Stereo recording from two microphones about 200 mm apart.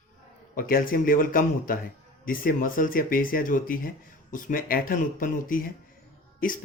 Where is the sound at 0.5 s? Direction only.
45° left (ahead or behind).